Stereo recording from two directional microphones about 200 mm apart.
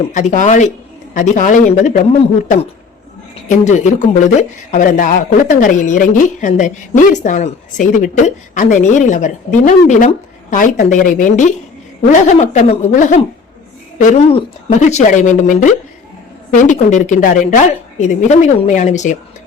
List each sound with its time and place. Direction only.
0.0 s speech: 40° left (ahead or behind)
3.3 s speech: 35° left (ahead or behind)